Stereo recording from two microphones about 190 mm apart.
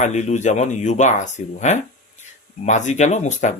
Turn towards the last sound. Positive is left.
turn(degrees=40)  # may be behind; listen again after turning